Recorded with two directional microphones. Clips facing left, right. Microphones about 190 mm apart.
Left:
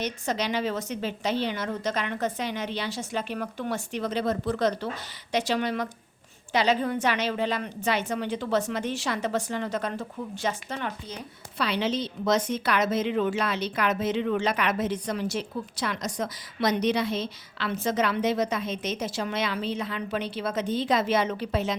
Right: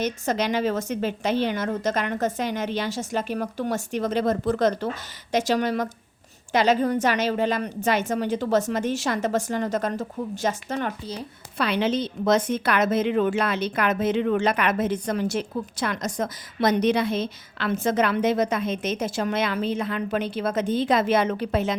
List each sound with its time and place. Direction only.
0.0 s a woman's voice: 45° right (ahead or behind)